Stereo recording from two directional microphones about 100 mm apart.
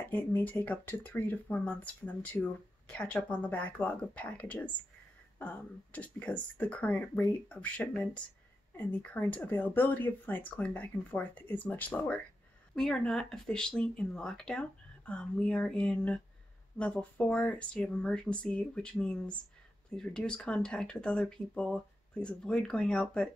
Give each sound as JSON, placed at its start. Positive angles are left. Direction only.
{"t": 0.1, "sound": "speech", "side_deg": 15}
{"t": 12.7, "sound": "speech", "side_deg": 5}